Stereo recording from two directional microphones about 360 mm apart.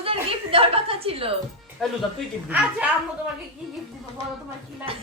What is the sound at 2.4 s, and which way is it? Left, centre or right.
Speech, centre.